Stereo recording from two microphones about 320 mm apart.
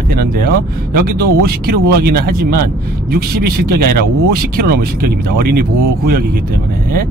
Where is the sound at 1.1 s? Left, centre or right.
Right.